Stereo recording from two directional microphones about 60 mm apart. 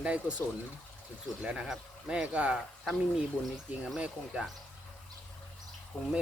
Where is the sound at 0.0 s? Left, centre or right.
Centre.